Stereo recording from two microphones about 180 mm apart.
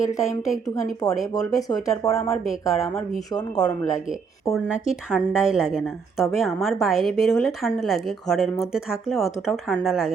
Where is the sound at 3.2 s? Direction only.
20° left (ahead or behind).